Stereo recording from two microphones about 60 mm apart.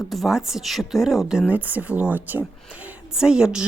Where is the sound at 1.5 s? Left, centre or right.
Right.